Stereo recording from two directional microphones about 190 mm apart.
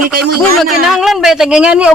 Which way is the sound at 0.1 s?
55° right (ahead or behind).